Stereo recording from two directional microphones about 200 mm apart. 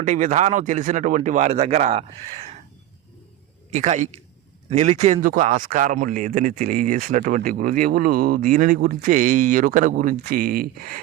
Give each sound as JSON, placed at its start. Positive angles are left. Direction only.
{"t": 0.0, "sound": "speech", "side_deg": -40}
{"t": 3.7, "sound": "speech", "side_deg": -35}